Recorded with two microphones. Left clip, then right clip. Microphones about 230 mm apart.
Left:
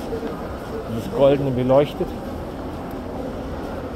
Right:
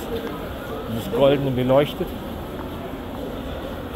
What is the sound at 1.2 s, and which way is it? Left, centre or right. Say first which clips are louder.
Speech: left 2 dB; centre.